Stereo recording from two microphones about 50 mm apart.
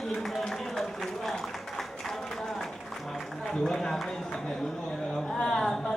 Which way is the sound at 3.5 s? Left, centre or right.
Centre.